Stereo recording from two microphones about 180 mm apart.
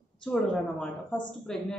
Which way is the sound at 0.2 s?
5° left (ahead or behind).